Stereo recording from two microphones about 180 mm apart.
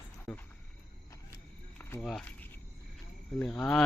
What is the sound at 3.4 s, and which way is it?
Speech, 5° left (ahead or behind).